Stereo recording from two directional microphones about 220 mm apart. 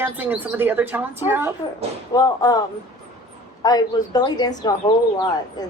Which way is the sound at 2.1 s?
15° left (ahead or behind).